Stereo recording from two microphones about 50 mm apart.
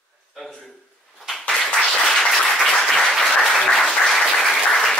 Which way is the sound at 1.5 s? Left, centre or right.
Centre.